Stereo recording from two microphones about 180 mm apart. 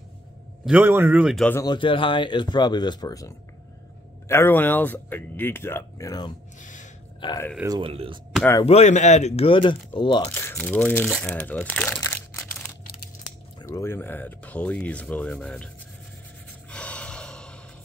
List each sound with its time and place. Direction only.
0.7 s speech: 10° right (ahead or behind)
1.4 s speech: 15° left (ahead or behind)
1.7 s speech: 30° left (ahead or behind)
6.6 s a sound: 45° left (ahead or behind)
7.2 s speech: 25° left (ahead or behind)
7.6 s speech: 20° right (ahead or behind)
7.9 s speech: 30° right (ahead or behind)
8.6 s a man's voice: 40° left (ahead or behind)
10.3 s speech: 10° left (ahead or behind)
12.0 s crumpling: 15° left (ahead or behind)
13.6 s speech: 15° left (ahead or behind)
16.7 s gasp: 5° left (ahead or behind)